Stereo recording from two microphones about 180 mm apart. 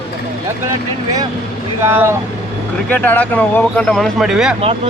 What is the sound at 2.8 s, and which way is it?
Speech, 10° left (ahead or behind).